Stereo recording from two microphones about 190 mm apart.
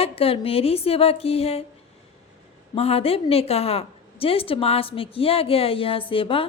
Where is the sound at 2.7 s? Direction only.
30° left (ahead or behind).